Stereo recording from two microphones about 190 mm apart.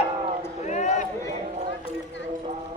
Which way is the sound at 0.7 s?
40° left (ahead or behind).